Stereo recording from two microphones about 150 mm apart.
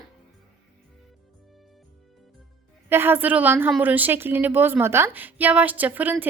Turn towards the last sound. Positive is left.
turn(degrees=-10)  # may be behind; listen again after turning